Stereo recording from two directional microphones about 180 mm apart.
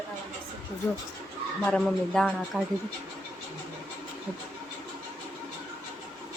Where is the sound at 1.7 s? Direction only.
5° left (ahead or behind).